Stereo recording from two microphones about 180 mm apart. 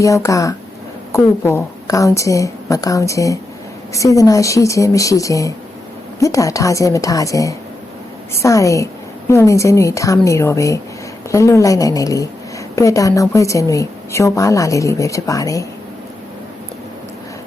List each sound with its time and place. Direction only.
0.0 s a woman's voice: 15° left (ahead or behind)